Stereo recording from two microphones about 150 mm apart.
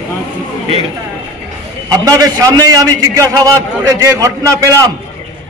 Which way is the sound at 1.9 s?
25° right (ahead or behind).